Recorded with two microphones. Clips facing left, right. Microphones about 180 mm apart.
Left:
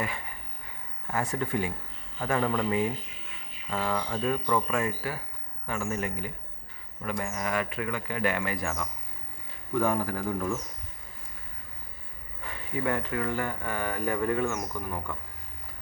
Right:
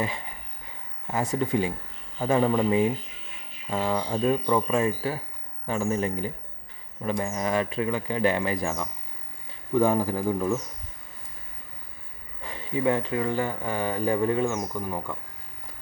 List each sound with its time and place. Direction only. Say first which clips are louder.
1.0 s speech: right 4 dB; 20° right (ahead or behind)
12.5 s speech: right 5 dB; 25° right (ahead or behind)